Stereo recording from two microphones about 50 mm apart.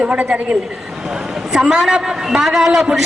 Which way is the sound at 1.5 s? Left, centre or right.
Centre.